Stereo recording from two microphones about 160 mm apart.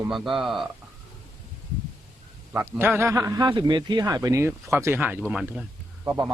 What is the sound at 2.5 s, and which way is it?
Speech, 15° right (ahead or behind).